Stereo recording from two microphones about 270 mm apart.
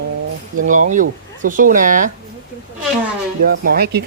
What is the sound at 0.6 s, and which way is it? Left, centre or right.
Speech, right.